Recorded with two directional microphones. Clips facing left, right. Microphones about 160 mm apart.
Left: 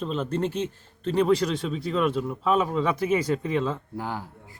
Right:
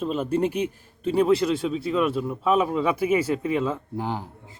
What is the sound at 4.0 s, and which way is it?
Speech, 20° right (ahead or behind).